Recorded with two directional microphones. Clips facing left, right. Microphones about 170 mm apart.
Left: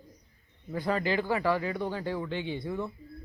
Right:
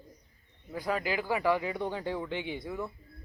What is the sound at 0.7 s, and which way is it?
Speech, 10° right (ahead or behind).